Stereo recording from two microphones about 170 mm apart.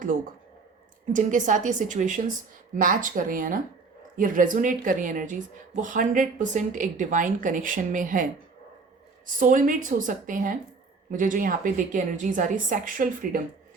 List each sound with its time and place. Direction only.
1.1 s speech: 50° right (ahead or behind)